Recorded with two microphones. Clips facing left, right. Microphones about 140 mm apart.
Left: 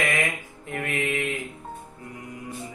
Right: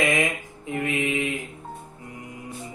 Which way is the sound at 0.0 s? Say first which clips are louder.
Right 3 dB; 15° right (ahead or behind).